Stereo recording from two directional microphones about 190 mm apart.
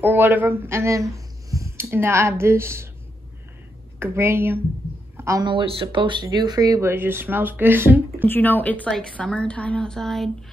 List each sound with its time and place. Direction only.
0.0 s speech: 10° right (ahead or behind)
4.0 s speech: 15° right (ahead or behind)
8.3 s a woman's voice: 10° left (ahead or behind)